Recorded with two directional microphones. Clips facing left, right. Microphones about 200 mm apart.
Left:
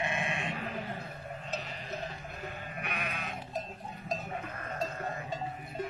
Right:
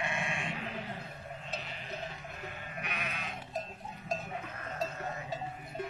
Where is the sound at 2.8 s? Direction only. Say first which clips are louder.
Left 3 dB; 55° left (ahead or behind).